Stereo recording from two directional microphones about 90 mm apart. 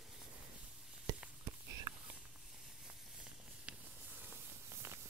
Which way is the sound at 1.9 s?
50° right (ahead or behind).